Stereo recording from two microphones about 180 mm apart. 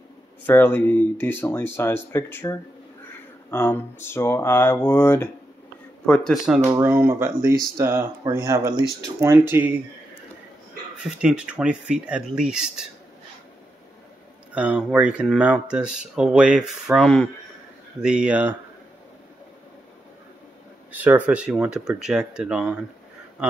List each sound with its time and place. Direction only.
0.5 s speech: 10° left (ahead or behind)
6.6 s speech: 15° right (ahead or behind)
11.0 s speech: 5° right (ahead or behind)
14.5 s speech: 5° right (ahead or behind)
20.9 s speech: 10° right (ahead or behind)